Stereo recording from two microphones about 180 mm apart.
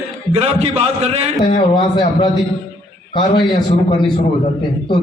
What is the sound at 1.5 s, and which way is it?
Speech, 30° left (ahead or behind).